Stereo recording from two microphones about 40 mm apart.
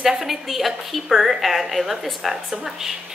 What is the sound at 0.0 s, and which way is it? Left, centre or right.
A woman's voice, centre.